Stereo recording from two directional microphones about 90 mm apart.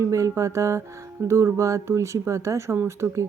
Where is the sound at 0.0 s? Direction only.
35° right (ahead or behind).